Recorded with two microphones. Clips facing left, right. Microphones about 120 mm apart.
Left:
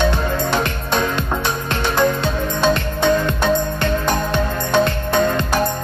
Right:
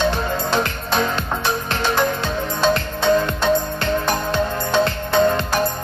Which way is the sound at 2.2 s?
20° left (ahead or behind).